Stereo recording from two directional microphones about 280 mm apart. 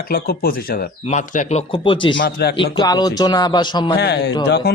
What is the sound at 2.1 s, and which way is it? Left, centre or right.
Speech, left.